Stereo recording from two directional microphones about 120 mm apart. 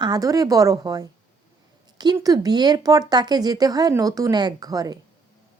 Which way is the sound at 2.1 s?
30° right (ahead or behind).